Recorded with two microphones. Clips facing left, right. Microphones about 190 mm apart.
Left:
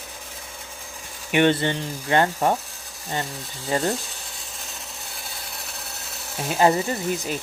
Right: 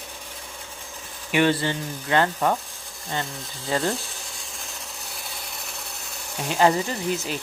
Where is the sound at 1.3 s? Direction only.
20° left (ahead or behind).